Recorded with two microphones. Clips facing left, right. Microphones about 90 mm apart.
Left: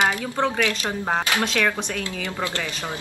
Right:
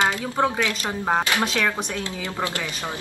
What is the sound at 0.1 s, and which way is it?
Speech, 20° right (ahead or behind).